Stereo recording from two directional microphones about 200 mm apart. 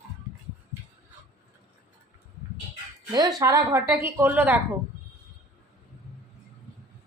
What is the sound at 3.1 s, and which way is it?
A woman's voice, 15° right (ahead or behind).